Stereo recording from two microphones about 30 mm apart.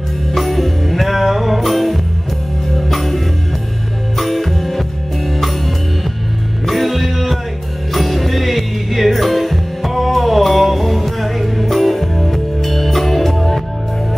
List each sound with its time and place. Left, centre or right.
0.3 s music: centre
4.2 s music: centre
6.7 s music: centre